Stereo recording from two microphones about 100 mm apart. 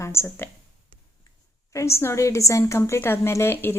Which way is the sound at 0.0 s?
25° left (ahead or behind).